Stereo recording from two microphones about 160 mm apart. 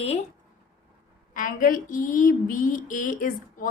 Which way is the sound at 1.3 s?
55° left (ahead or behind).